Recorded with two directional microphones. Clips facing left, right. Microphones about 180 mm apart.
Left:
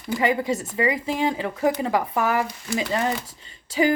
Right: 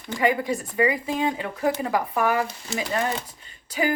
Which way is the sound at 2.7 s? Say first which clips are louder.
Left 7 dB; 25° right (ahead or behind).